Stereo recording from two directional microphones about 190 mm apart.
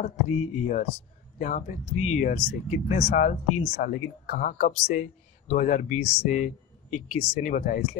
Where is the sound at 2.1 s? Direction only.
40° left (ahead or behind).